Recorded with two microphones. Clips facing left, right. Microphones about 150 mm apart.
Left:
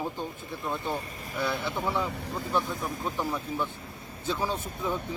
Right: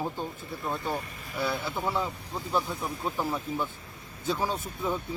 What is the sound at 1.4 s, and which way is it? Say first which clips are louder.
Speech: even; 5° right (ahead or behind).